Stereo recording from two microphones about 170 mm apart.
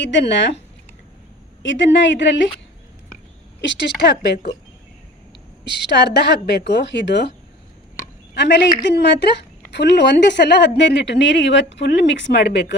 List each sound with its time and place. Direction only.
0.0 s a woman's voice: 90° left
1.6 s a woman's voice: 90° left
3.6 s a woman's voice: 90° left
5.6 s a woman's voice: 90° left
8.4 s a woman's voice: 90° left